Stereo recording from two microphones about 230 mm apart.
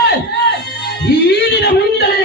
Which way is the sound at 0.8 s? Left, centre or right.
Left.